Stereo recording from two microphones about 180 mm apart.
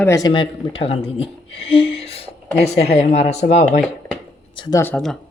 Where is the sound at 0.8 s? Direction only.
30° left (ahead or behind).